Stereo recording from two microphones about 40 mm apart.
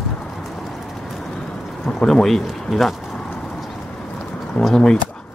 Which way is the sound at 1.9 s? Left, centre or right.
Centre.